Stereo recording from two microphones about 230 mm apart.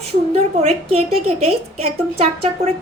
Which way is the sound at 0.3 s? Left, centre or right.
Right.